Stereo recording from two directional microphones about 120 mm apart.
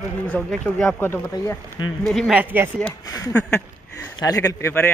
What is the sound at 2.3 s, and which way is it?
Speech, 15° right (ahead or behind).